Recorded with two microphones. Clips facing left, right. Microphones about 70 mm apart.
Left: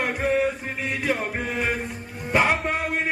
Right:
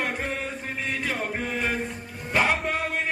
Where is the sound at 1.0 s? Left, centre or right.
Centre.